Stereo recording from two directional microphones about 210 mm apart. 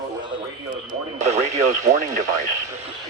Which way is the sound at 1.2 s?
35° right (ahead or behind).